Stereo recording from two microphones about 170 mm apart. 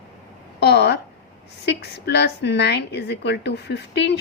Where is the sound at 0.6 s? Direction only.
80° left.